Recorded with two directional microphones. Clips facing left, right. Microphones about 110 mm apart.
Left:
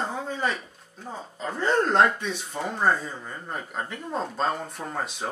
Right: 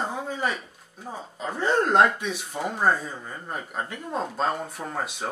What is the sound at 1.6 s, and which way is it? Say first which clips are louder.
Speech: right 1 dB; 10° right (ahead or behind).